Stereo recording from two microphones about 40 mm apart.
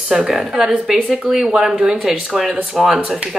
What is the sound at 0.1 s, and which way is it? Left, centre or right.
Speech, centre.